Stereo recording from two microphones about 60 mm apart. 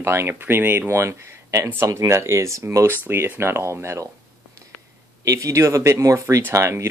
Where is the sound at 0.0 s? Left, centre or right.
Right.